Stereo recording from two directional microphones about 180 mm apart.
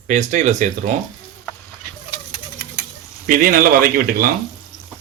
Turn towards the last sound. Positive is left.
turn(degrees=-55)  # may be behind; listen again after turning